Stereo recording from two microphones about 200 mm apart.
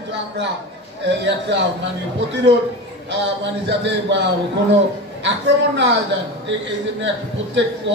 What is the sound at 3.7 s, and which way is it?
A man's voice, 60° right (ahead or behind).